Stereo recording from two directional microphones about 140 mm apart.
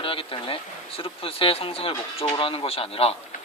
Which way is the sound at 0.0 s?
40° left (ahead or behind).